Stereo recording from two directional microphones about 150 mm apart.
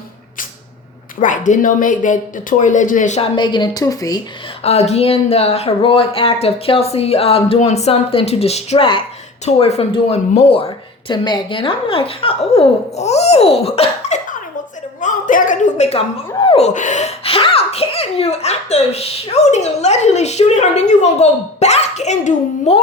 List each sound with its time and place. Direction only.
1.2 s speech: 60° left (ahead or behind)
3.2 s a woman's voice: 30° left (ahead or behind)
4.6 s speech: 45° left (ahead or behind)
11.1 s speech: 30° left (ahead or behind); by 14.3 s 45° left (ahead or behind)
15.0 s a woman's voice: 65° left (ahead or behind)